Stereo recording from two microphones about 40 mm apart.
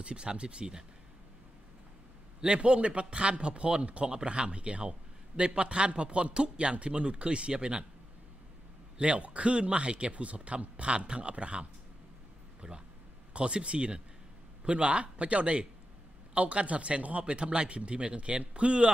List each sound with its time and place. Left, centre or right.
0.0 s a man's voice: right
2.4 s a man's voice: right
8.9 s a man's voice: right
12.6 s a man's voice: right